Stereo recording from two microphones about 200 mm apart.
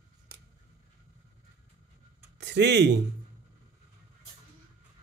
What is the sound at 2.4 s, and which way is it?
Speech, 60° right (ahead or behind).